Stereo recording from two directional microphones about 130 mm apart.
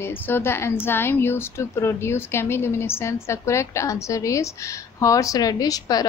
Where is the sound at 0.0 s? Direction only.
15° left (ahead or behind).